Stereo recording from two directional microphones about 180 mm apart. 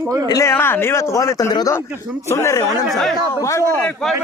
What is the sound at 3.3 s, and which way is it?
Speech, 15° left (ahead or behind).